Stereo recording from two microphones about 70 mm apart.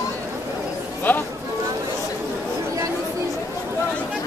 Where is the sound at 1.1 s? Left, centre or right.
Left.